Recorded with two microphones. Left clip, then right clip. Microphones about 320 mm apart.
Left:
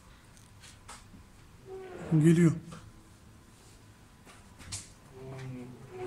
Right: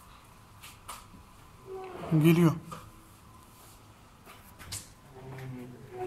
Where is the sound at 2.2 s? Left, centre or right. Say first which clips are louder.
Right 1 dB; right.